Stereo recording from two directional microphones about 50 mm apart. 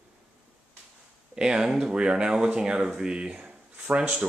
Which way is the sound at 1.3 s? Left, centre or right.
Centre.